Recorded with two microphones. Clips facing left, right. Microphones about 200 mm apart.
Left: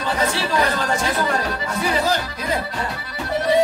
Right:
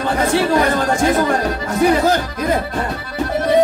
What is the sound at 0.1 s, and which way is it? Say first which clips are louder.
Speech: right 6 dB; 50° right (ahead or behind).